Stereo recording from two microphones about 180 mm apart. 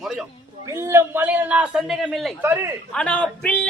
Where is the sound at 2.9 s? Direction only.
5° left (ahead or behind).